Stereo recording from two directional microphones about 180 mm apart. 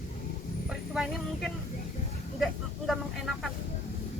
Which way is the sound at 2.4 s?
Centre (ahead or behind).